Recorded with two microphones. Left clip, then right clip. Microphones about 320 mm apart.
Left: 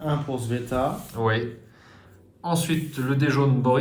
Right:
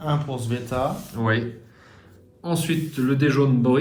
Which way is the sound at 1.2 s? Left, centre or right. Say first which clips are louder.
Even; centre.